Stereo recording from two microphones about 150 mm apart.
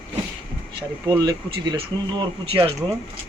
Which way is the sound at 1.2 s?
30° right (ahead or behind).